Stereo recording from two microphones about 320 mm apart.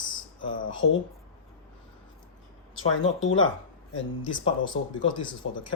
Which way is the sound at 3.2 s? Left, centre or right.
Left.